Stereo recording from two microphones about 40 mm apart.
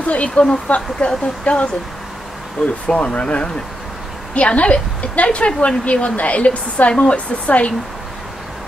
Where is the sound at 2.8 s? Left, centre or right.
Left.